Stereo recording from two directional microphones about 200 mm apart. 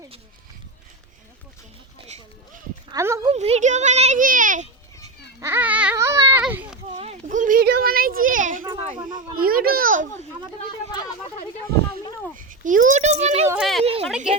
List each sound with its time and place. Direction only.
2.9 s speech: 15° right (ahead or behind)
3.3 s a child's voice: 35° right (ahead or behind)
5.4 s baby cry: 10° right (ahead or behind)
6.4 s a sound: 5° right (ahead or behind)
6.9 s a sound: 30° right (ahead or behind)
9.4 s a child's voice: 45° right (ahead or behind)
12.0 s a sound: 15° left (ahead or behind)
12.4 s a child's voice: 40° right (ahead or behind)
13.6 s speech: centre (ahead or behind)
13.8 s speech: 30° right (ahead or behind)